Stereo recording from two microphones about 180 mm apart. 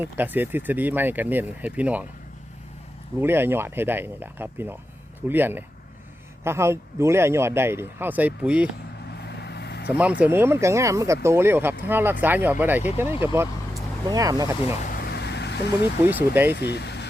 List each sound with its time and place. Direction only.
0.0 s speech: 10° right (ahead or behind)
3.2 s speech: 10° right (ahead or behind)
9.1 s vehicle: 65° left (ahead or behind)
9.9 s speech: 10° right (ahead or behind)
14.8 s vehicle: 55° left (ahead or behind)
16.0 s speech: 10° right (ahead or behind)
16.6 s speech: 70° left (ahead or behind)